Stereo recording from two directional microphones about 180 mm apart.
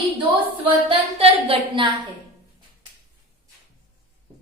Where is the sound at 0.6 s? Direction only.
30° right (ahead or behind).